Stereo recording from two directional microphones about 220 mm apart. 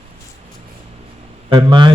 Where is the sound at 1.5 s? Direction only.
20° right (ahead or behind).